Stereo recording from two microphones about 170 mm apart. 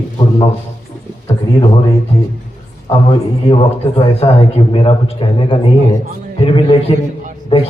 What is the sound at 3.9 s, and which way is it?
A man's voice, 35° left (ahead or behind).